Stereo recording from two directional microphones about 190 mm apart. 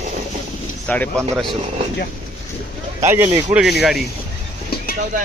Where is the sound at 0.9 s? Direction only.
5° left (ahead or behind).